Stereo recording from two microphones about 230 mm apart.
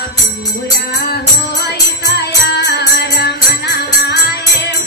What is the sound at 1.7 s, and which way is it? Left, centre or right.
Music, left.